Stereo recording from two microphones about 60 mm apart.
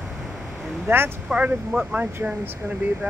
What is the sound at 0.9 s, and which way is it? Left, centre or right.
Speech, right.